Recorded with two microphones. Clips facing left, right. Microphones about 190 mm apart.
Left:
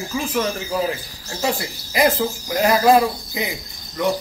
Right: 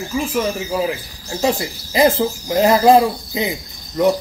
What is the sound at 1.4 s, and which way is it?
Speech, 25° right (ahead or behind).